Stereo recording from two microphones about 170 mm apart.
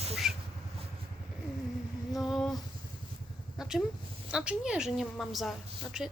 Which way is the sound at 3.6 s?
Centre (ahead or behind).